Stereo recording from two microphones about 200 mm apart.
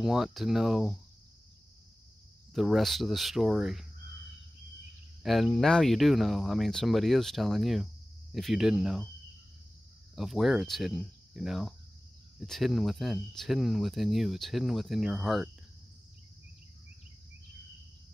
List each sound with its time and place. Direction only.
0.0 s speech: centre (ahead or behind)
2.5 s speech: centre (ahead or behind)
5.2 s speech: centre (ahead or behind)
10.1 s speech: centre (ahead or behind)